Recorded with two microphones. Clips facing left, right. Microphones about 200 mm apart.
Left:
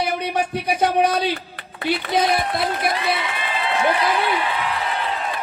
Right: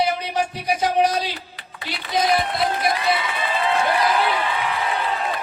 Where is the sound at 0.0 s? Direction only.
55° left (ahead or behind).